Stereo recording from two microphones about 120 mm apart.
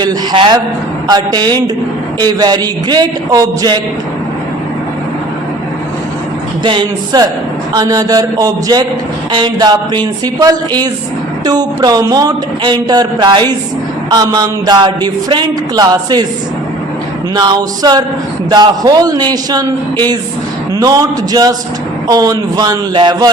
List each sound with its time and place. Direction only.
0.0 s speech: 35° right (ahead or behind)
6.7 s speech: 35° right (ahead or behind)
17.3 s speech: 35° right (ahead or behind)